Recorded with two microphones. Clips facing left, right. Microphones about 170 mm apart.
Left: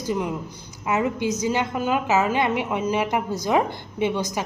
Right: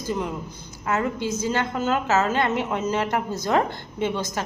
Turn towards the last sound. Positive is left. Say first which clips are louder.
# left 2 dB
turn(degrees=15)  # may be behind; listen again after turning